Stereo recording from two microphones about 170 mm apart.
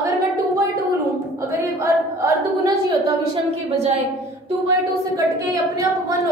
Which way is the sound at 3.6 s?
40° right (ahead or behind).